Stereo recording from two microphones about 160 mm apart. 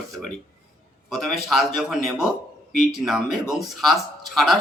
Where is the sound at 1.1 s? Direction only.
Centre (ahead or behind).